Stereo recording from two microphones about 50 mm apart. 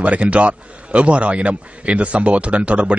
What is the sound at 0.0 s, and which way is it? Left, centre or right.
A man's voice, right.